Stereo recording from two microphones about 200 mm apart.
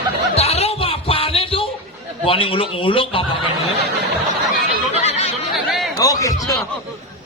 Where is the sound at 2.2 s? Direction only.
25° left (ahead or behind).